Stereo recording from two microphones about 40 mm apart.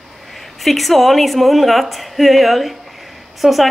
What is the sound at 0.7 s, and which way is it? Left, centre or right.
Speech, centre.